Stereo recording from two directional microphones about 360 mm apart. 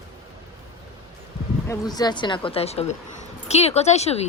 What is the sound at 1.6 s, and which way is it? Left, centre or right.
Speech, centre.